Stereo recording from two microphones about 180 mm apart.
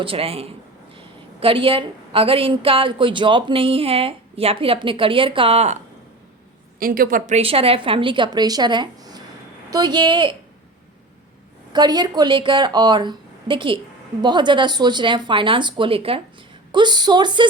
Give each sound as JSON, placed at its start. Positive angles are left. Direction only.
{"t": 0.0, "sound": "a woman's voice", "side_deg": -30}
{"t": 6.7, "sound": "a woman's voice", "side_deg": -50}
{"t": 11.7, "sound": "a woman's voice", "side_deg": -25}